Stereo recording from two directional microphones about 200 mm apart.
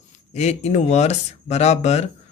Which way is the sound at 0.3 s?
35° left (ahead or behind).